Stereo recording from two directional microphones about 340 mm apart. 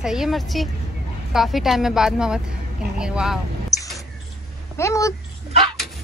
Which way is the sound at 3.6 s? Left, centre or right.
Centre.